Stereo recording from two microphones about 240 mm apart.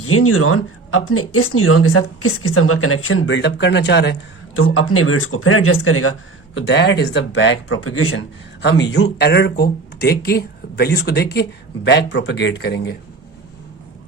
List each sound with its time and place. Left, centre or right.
0.0 s speech: left
8.6 s a man's voice: left